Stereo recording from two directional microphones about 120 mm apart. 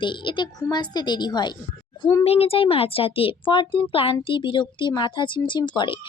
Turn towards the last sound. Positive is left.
turn(degrees=40)  # may be behind; listen again after turning